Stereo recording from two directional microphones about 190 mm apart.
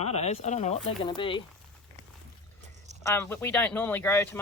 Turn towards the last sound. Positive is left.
turn(degrees=15)  # may be behind; listen again after turning